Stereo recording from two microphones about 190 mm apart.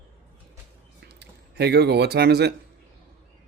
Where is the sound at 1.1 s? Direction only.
60° right (ahead or behind).